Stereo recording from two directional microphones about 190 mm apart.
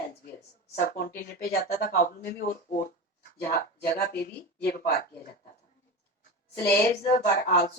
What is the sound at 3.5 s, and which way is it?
Speech, 55° left (ahead or behind).